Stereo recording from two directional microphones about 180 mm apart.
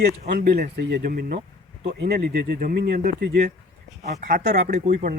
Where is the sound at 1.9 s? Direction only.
65° right (ahead or behind).